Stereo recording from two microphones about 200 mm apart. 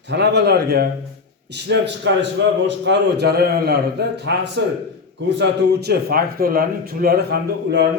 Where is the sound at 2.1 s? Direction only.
60° right (ahead or behind).